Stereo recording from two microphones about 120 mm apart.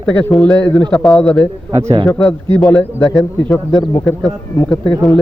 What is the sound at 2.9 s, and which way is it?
Speech, 20° left (ahead or behind).